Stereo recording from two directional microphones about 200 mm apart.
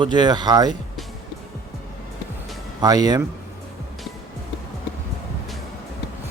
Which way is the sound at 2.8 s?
20° right (ahead or behind).